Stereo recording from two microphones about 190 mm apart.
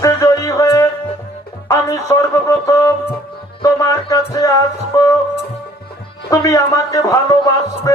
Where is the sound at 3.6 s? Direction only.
20° left (ahead or behind).